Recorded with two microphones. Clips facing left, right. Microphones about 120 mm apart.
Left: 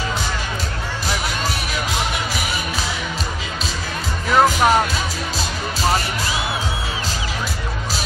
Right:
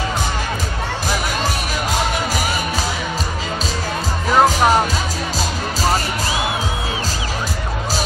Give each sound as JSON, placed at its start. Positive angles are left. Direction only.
{"t": 4.3, "sound": "music", "side_deg": -15}